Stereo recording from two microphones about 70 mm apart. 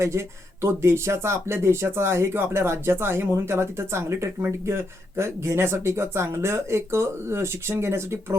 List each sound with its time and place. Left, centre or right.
0.0 s speech: right